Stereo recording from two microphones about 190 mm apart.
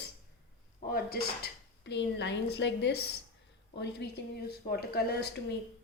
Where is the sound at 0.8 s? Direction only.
50° left (ahead or behind).